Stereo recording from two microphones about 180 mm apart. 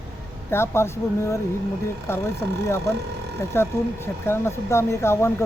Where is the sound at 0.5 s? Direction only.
15° left (ahead or behind).